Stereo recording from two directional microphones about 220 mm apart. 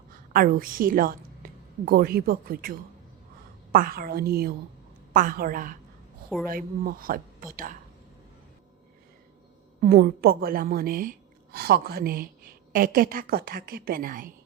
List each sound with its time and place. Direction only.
0.3 s a woman's voice: 40° right (ahead or behind)
9.8 s a woman's voice: 45° right (ahead or behind)